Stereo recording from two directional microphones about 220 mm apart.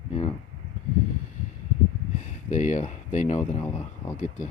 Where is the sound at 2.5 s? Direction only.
35° left (ahead or behind).